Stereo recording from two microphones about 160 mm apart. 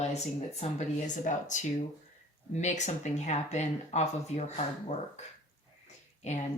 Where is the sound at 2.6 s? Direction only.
45° left (ahead or behind).